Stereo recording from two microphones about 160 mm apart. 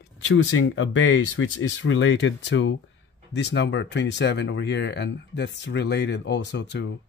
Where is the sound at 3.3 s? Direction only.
90° left.